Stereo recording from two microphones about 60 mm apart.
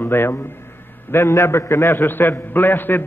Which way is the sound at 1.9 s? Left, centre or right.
Left.